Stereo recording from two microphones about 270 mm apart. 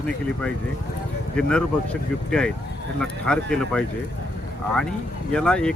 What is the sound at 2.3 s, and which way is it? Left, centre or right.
Speech, centre.